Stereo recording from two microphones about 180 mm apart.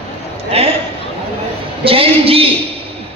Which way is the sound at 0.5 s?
35° right (ahead or behind).